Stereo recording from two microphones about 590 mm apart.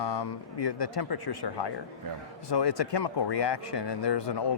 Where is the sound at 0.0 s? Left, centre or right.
Left.